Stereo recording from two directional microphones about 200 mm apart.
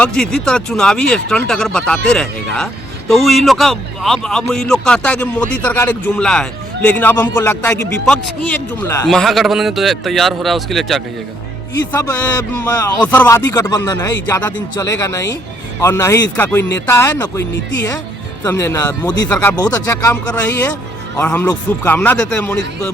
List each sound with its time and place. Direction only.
0.0 s speech: 5° left (ahead or behind)
9.0 s speech: centre (ahead or behind)
11.9 s speech: 15° left (ahead or behind)
18.4 s speech: 15° left (ahead or behind)